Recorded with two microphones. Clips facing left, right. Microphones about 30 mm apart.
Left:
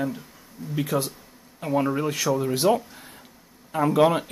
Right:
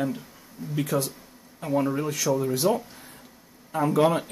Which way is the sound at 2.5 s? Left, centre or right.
Left.